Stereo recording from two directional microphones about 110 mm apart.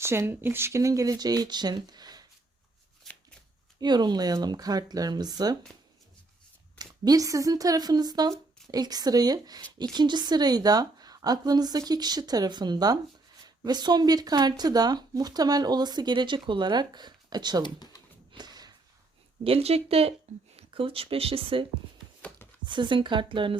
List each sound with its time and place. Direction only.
0.0 s speech: 25° right (ahead or behind); by 2.2 s 40° right (ahead or behind)
3.1 s shuffling cards: centre (ahead or behind)
3.8 s speech: 40° right (ahead or behind)
6.7 s speech: 35° right (ahead or behind)
17.6 s speech: 40° left (ahead or behind)
18.3 s snort: 40° right (ahead or behind)
19.5 s speech: 65° right (ahead or behind); by 23.6 s 50° right (ahead or behind)